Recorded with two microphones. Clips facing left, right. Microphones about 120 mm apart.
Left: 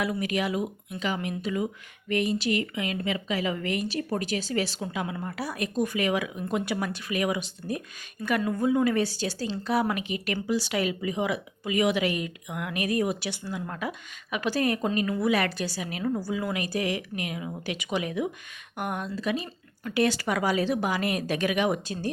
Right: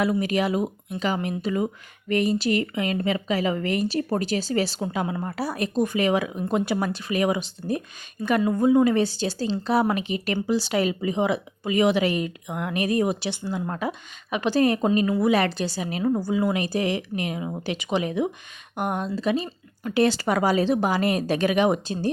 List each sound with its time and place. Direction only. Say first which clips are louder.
0.0 s speech: right 5 dB; 30° right (ahead or behind)